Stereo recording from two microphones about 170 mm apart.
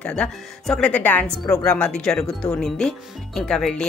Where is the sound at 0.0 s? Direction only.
5° left (ahead or behind).